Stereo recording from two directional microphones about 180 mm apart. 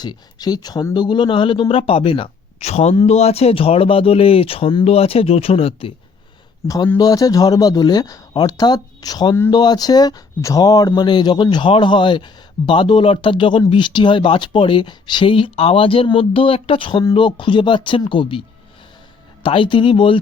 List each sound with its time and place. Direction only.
0.0 s speech: 20° left (ahead or behind)
6.9 s speech: 20° left (ahead or behind)